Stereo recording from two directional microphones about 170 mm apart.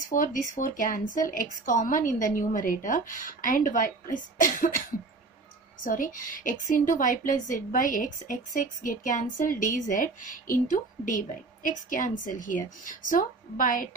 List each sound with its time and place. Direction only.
0.1 s a woman's voice: 50° left (ahead or behind)